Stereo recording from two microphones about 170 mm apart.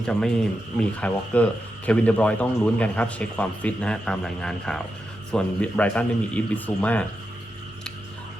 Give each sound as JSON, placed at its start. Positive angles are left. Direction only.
{"t": 0.0, "sound": "a man's voice", "side_deg": 5}